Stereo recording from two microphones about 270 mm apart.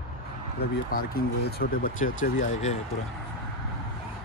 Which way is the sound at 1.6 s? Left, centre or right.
Left.